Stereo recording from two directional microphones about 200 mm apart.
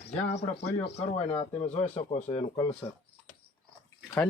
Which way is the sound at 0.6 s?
30° left (ahead or behind).